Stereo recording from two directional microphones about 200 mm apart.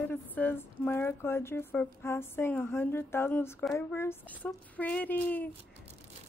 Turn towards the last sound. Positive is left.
turn(degrees=10)  # may be behind; listen again after turning